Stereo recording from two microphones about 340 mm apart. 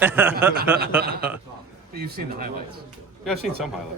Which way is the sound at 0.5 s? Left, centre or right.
Right.